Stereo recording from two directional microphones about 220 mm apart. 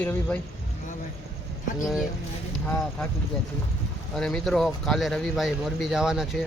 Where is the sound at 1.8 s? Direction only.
Centre (ahead or behind).